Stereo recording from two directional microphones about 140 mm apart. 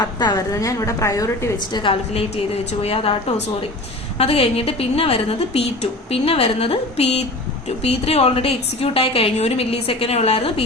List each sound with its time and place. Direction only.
0.0 s a woman's voice: 30° left (ahead or behind)
1.7 s a woman's voice: 40° left (ahead or behind)